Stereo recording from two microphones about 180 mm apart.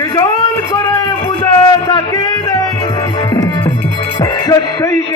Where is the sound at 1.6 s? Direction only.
25° left (ahead or behind).